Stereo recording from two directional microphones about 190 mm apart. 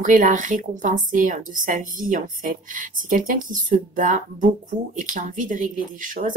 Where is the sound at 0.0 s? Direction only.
45° right (ahead or behind).